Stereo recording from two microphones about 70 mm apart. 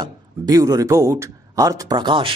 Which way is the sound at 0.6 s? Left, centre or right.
Right.